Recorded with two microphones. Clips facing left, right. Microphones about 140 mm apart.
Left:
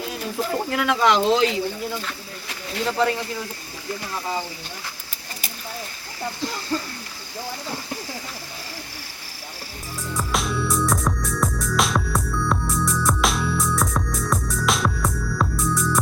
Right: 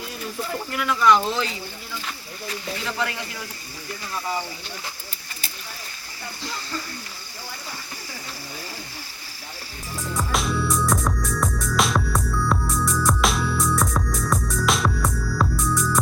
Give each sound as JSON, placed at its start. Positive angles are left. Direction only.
{"t": 0.7, "sound": "speech", "side_deg": 90}
{"t": 10.2, "sound": "music", "side_deg": 0}